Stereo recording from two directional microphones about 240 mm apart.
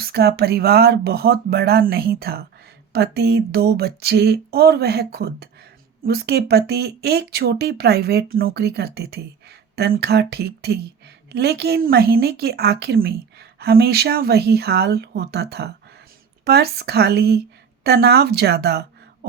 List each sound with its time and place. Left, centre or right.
0.0 s a woman's voice: right